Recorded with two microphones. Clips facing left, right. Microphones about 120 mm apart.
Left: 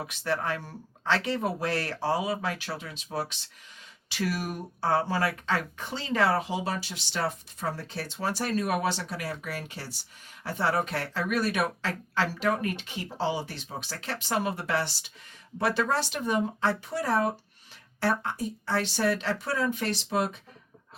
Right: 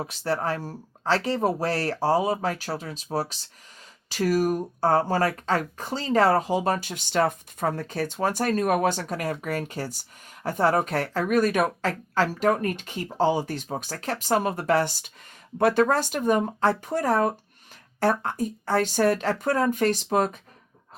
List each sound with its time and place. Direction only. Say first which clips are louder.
0.0 s speech: right 3 dB; 35° right (ahead or behind)